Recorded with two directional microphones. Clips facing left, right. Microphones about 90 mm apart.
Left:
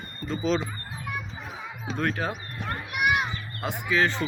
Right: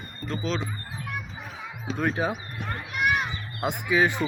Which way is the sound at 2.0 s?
10° right (ahead or behind).